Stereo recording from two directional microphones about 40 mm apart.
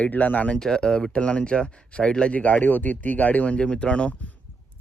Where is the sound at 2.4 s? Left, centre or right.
Left.